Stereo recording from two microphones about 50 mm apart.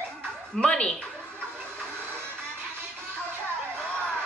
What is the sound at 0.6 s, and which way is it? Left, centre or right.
Speech, centre.